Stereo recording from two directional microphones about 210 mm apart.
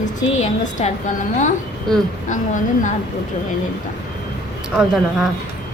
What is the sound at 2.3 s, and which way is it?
Speech, 35° left (ahead or behind).